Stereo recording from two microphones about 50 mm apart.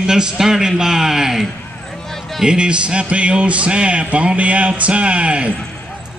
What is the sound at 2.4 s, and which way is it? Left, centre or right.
A man's voice, centre.